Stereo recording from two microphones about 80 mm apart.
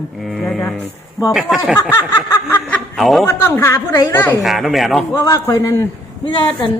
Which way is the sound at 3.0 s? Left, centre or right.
Centre.